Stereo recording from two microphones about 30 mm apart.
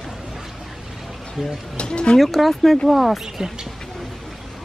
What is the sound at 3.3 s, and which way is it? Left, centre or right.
Speech, centre.